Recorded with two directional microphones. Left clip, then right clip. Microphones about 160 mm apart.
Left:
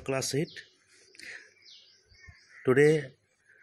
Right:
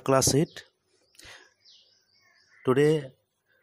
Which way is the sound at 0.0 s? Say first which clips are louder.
Right 8 dB; 55° right (ahead or behind).